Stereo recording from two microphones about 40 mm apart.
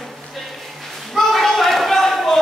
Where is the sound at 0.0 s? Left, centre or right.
Centre.